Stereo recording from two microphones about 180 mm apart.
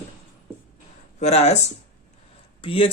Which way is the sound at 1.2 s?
40° left (ahead or behind).